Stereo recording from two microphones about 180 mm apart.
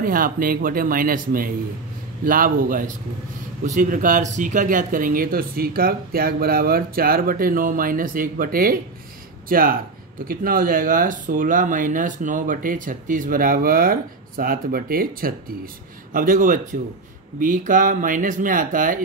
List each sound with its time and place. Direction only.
0.0 s speech: 50° right (ahead or behind)